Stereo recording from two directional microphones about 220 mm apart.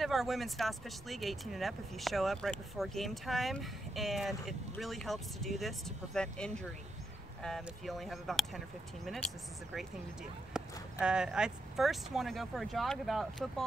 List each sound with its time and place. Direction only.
0.0 s speech: centre (ahead or behind)
10.5 s speech: 5° right (ahead or behind)